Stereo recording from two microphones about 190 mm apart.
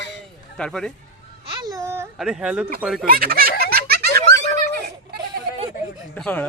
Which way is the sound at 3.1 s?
50° right (ahead or behind).